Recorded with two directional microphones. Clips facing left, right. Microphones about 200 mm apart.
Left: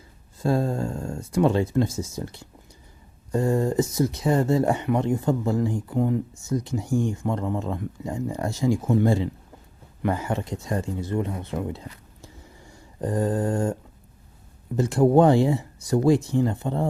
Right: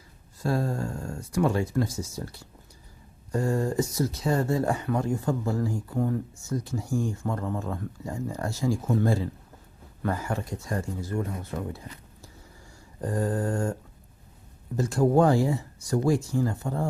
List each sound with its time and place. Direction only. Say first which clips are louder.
0.3 s speech: left 4 dB; 25° left (ahead or behind)
13.0 s speech: left 4 dB; 20° left (ahead or behind)
14.8 s speech: left 4 dB; 20° left (ahead or behind)